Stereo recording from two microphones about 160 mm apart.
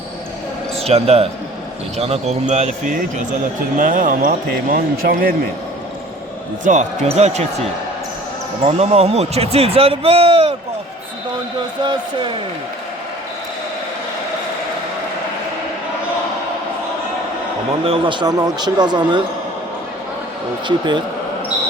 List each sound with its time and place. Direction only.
0.8 s speech: 40° right (ahead or behind)
3.8 s speech: 60° right (ahead or behind)
6.7 s speech: 45° right (ahead or behind)
8.6 s speech: 40° right (ahead or behind)
11.8 s speech: 30° right (ahead or behind)
17.8 s speech: 35° right (ahead or behind)
20.7 s speech: 30° right (ahead or behind)